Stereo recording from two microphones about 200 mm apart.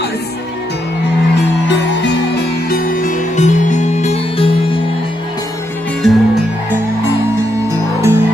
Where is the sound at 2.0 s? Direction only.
55° left (ahead or behind); by 4.4 s 35° left (ahead or behind).